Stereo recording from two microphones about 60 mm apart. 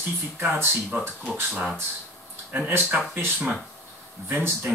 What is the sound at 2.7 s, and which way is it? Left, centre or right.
Speech, right.